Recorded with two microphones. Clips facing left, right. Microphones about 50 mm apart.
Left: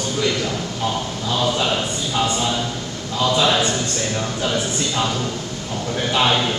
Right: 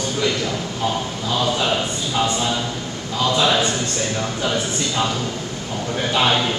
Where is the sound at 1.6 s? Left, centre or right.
Centre.